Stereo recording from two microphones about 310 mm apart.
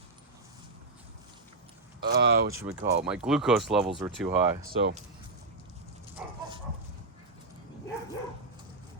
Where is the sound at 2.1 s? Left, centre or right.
Right.